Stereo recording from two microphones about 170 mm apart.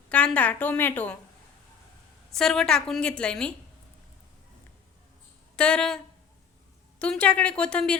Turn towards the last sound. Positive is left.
turn(degrees=5)  # may be behind; listen again after turning